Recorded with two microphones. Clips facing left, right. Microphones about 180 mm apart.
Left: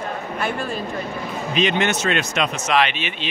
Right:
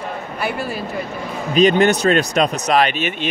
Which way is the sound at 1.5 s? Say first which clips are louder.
Right 8 dB; 40° right (ahead or behind).